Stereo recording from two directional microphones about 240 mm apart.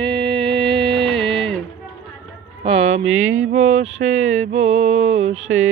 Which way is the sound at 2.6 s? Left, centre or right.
Right.